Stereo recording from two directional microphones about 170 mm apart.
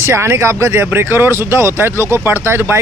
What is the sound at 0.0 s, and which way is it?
A man's voice, 15° right (ahead or behind).